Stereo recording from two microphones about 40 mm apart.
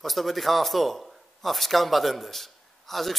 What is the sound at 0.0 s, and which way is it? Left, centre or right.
A man's voice, centre.